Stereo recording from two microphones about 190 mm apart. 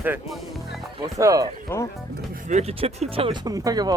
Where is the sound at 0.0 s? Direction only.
10° right (ahead or behind).